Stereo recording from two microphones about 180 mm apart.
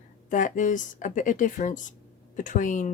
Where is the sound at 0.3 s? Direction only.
45° left (ahead or behind).